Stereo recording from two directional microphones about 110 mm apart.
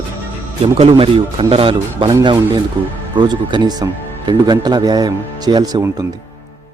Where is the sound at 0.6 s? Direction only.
60° right (ahead or behind).